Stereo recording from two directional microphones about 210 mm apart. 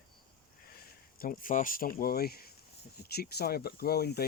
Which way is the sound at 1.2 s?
40° left (ahead or behind).